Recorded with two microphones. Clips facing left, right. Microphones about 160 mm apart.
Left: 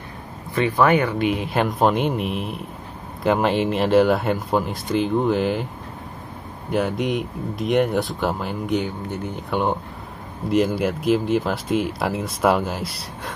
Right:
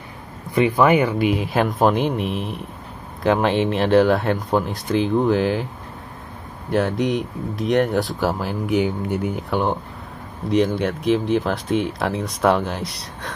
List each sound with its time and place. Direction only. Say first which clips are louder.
0.6 s speech: right 2 dB; 10° right (ahead or behind)
6.7 s speech: right 2 dB; centre (ahead or behind)
9.5 s speech: left 2 dB; centre (ahead or behind)